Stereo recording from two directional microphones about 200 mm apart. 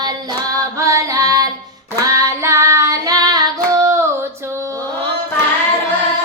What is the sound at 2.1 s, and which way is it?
Singing, 15° right (ahead or behind).